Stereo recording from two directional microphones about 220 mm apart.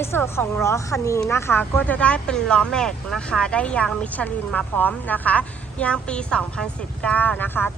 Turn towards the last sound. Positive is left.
turn(degrees=10)  # may be behind; listen again after turning